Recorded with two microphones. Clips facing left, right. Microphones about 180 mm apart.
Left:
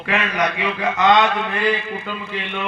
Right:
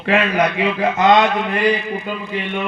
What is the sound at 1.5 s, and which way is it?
A man's voice, 15° right (ahead or behind).